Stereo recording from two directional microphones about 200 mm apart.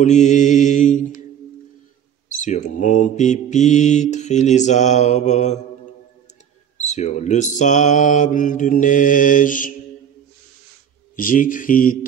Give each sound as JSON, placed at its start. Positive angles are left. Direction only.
{"t": 0.0, "sound": "mantra", "side_deg": 35}
{"t": 2.3, "sound": "mantra", "side_deg": 40}
{"t": 6.8, "sound": "mantra", "side_deg": 35}
{"t": 11.1, "sound": "a man's voice", "side_deg": 45}